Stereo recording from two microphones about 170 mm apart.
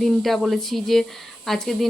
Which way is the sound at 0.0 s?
Centre (ahead or behind).